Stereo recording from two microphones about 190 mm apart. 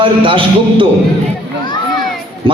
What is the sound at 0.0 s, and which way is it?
Speech, 25° right (ahead or behind).